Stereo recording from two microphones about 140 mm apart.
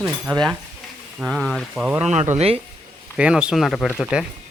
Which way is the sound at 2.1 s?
55° right (ahead or behind).